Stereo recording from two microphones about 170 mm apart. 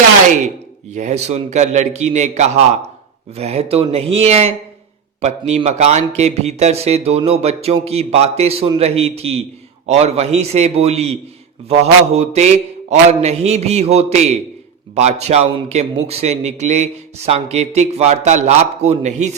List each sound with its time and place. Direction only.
0.9 s a man's voice: 45° right (ahead or behind)